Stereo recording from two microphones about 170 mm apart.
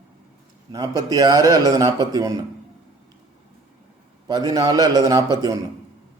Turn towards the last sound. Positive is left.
turn(degrees=-20)  # may be behind; listen again after turning